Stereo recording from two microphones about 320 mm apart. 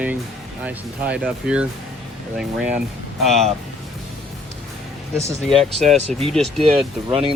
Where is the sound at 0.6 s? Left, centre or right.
Centre.